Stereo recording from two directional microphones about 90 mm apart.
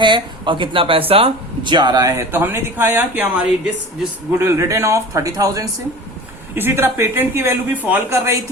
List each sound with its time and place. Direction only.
0.0 s speech: 65° right (ahead or behind)
2.3 s speech: 25° right (ahead or behind)
4.4 s a man's voice: 30° right (ahead or behind)
7.7 s a man's voice: 15° right (ahead or behind)
8.1 s a man's voice: 30° right (ahead or behind)